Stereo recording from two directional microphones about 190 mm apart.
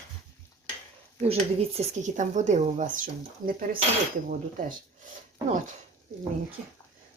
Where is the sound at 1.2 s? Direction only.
35° right (ahead or behind); by 3.8 s 50° right (ahead or behind).